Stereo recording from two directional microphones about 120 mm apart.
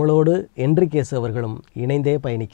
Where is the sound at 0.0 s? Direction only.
15° left (ahead or behind).